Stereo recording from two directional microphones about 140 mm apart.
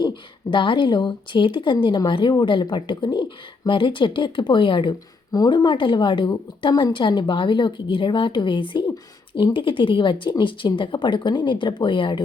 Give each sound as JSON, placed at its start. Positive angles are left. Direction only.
{"t": 0.0, "sound": "speech", "side_deg": 35}